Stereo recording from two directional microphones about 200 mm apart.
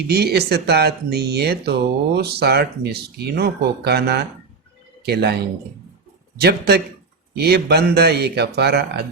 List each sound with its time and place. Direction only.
0.1 s speech: 55° right (ahead or behind)